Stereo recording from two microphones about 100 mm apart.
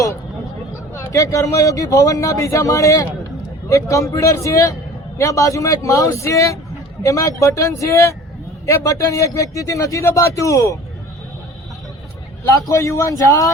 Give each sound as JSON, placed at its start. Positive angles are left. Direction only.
{"t": 0.9, "sound": "speech", "side_deg": 30}
{"t": 12.5, "sound": "speech", "side_deg": 30}